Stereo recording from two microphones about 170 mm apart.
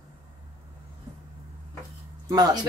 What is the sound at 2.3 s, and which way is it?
Speech, 25° right (ahead or behind).